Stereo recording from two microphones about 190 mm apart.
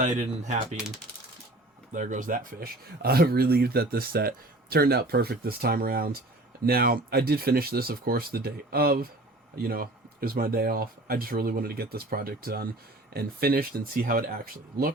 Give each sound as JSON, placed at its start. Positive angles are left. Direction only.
{"t": 0.0, "sound": "speech", "side_deg": -40}
{"t": 1.9, "sound": "speech", "side_deg": -45}